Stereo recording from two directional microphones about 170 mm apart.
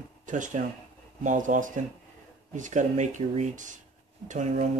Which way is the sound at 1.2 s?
50° right (ahead or behind).